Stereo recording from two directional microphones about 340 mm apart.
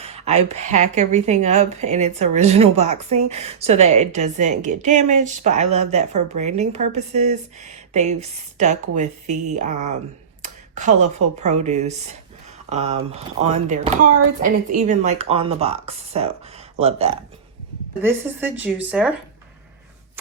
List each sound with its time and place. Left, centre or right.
0.0 s a woman's voice: centre
10.4 s a sound: right
11.3 s a woman's voice: centre
18.0 s speech: centre